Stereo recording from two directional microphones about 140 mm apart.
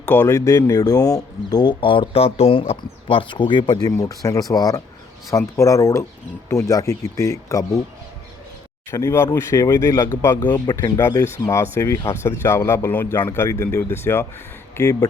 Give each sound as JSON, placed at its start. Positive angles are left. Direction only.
{"t": 0.0, "sound": "speech", "side_deg": 15}
{"t": 8.9, "sound": "speech", "side_deg": 20}